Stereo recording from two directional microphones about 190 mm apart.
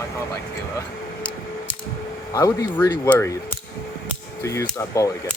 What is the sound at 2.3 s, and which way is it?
Speech, 20° left (ahead or behind).